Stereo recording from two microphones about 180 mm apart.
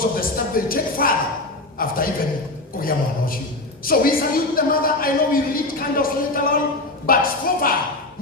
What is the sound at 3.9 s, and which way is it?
A woman's voice, 55° left (ahead or behind).